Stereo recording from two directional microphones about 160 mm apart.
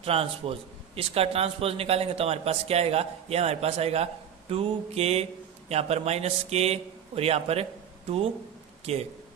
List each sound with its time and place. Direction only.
0.0 s speech: 35° right (ahead or behind)
8.9 s a man's voice: 40° right (ahead or behind)